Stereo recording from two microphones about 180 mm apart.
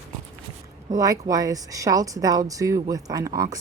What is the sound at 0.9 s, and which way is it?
Speech, 20° right (ahead or behind).